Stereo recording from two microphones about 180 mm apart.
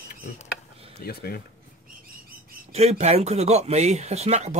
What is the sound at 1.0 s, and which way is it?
Speech, 55° left (ahead or behind).